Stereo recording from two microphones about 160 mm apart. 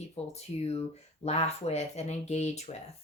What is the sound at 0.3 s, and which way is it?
Speech, 40° left (ahead or behind).